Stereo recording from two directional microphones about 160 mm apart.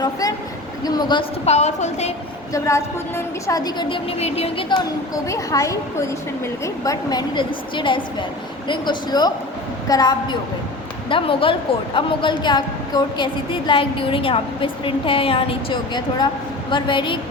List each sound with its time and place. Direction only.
0.0 s a woman's voice: 25° left (ahead or behind)
1.5 s a woman's voice: 45° left (ahead or behind)
2.5 s a woman's voice: 20° left (ahead or behind); by 4.8 s 35° left (ahead or behind)
5.1 s a woman's voice: 20° left (ahead or behind)